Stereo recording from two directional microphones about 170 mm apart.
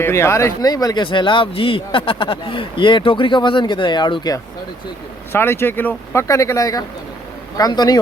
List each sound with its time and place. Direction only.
0.0 s speech: 15° left (ahead or behind)
5.3 s speech: 15° left (ahead or behind)